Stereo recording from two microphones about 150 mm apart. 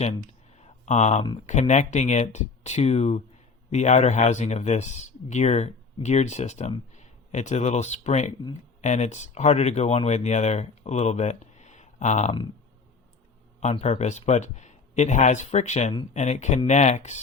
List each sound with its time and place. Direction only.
0.6 s a sound: 50° left (ahead or behind)
1.5 s speech: 50° left (ahead or behind)
13.6 s speech: 50° left (ahead or behind)